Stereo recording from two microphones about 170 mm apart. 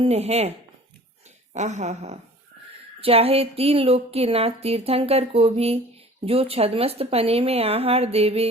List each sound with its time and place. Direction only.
0.0 s a woman's voice: 40° right (ahead or behind)
1.5 s a woman's voice: 45° right (ahead or behind)